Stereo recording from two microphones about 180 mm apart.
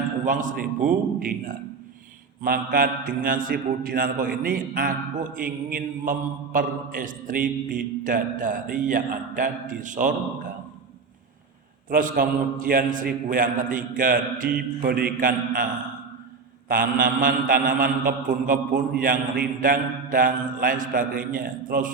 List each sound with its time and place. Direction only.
0.3 s a man's voice: 45° right (ahead or behind)
11.9 s a man's voice: 50° right (ahead or behind)
16.6 s a man's voice: 50° right (ahead or behind)